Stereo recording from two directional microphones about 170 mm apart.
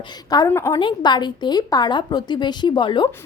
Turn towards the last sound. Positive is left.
turn(degrees=30)  # may be behind; listen again after turning